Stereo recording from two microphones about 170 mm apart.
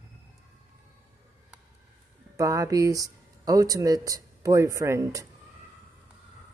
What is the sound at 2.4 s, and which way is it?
Speech, 20° right (ahead or behind).